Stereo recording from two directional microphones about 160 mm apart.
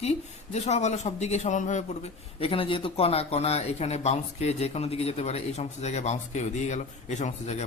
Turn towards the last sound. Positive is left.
turn(degrees=45)  # may be behind; listen again after turning